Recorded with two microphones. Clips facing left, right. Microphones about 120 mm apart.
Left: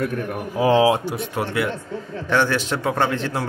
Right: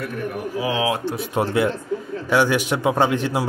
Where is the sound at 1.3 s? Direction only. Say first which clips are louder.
Right 5 dB; 25° right (ahead or behind).